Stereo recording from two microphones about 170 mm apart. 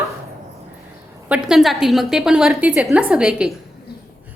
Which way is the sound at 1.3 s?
5° right (ahead or behind).